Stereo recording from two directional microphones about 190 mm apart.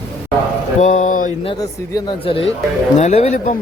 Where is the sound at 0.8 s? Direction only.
40° left (ahead or behind).